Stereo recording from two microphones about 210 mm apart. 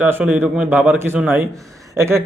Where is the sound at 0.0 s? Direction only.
5° right (ahead or behind).